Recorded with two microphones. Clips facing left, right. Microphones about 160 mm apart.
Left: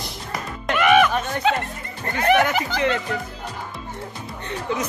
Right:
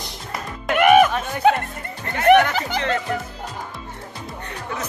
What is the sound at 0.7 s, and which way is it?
Music, 45° right (ahead or behind).